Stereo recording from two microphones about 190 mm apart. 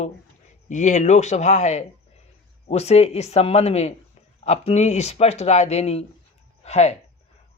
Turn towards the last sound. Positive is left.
turn(degrees=35)  # may be behind; listen again after turning